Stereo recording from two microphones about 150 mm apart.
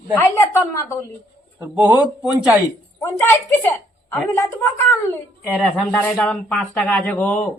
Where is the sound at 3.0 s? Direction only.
15° left (ahead or behind).